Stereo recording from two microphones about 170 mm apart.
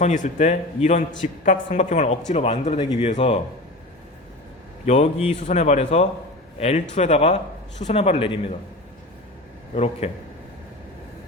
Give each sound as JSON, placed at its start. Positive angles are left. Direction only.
{"t": 0.0, "sound": "a man's voice", "side_deg": 45}
{"t": 4.9, "sound": "speech", "side_deg": 40}
{"t": 9.7, "sound": "speech", "side_deg": 40}